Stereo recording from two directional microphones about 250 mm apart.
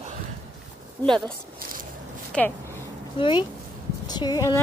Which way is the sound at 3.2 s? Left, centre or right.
Centre.